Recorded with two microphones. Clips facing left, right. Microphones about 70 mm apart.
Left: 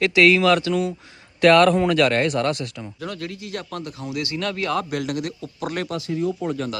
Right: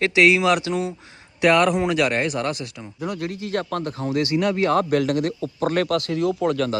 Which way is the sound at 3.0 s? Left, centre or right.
Centre.